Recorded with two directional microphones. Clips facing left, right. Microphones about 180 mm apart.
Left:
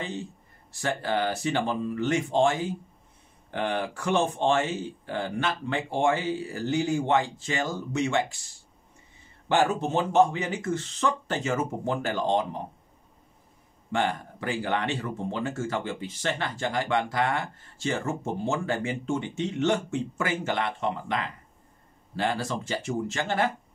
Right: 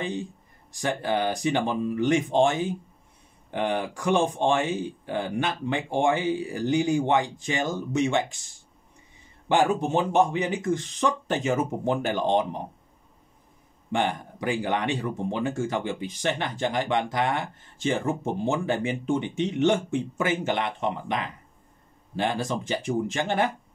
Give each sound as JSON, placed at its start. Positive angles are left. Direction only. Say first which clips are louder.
{"t": 0.0, "sound": "speech", "louder": "right 3 dB", "side_deg": -15}
{"t": 13.9, "sound": "speech", "louder": "right 1 dB", "side_deg": -15}